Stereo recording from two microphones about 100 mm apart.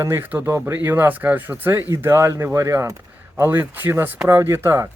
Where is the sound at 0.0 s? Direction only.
25° right (ahead or behind).